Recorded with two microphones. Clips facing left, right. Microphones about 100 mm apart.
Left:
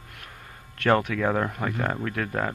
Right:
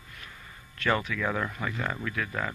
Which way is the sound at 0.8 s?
60° left (ahead or behind).